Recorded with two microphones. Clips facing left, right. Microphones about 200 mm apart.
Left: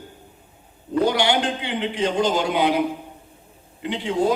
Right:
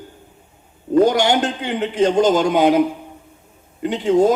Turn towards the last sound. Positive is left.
turn(degrees=-45)  # may be behind; listen again after turning